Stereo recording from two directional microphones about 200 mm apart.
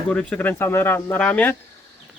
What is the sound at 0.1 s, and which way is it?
Speech, 5° left (ahead or behind).